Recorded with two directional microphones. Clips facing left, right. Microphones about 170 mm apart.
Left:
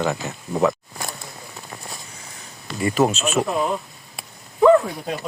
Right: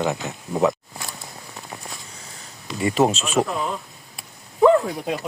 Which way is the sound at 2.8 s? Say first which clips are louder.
Even; 25° right (ahead or behind).